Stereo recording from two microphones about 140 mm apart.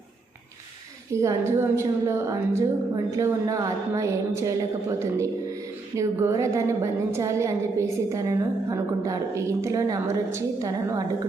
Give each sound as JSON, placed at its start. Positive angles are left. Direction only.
{"t": 1.1, "sound": "a woman's voice", "side_deg": -20}